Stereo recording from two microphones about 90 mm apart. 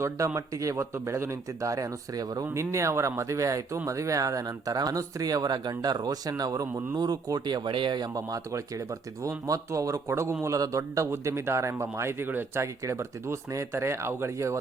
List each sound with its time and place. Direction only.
0.3 s a man's voice: 35° right (ahead or behind)
2.5 s a man's voice: 30° right (ahead or behind)